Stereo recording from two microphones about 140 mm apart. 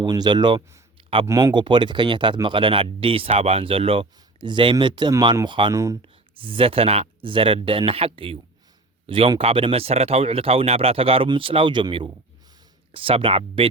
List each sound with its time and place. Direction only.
0.0 s speech: 30° right (ahead or behind)
1.3 s speech: 25° right (ahead or behind)
1.5 s speech: 35° right (ahead or behind)
5.7 s speech: 25° right (ahead or behind)
6.0 s speech: 40° right (ahead or behind)